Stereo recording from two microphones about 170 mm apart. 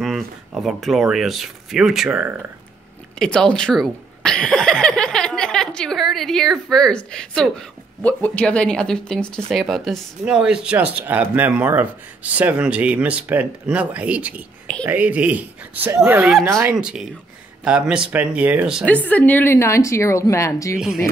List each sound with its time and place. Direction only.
0.0 s speech: centre (ahead or behind)
3.2 s speech: 5° left (ahead or behind)
18.9 s a woman's voice: 10° left (ahead or behind)